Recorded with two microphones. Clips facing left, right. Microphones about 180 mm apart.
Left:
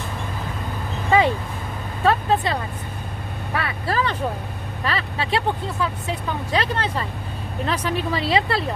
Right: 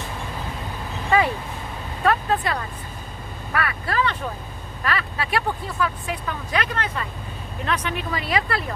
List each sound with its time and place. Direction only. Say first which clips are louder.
2.0 s speech: left 2 dB; 25° left (ahead or behind)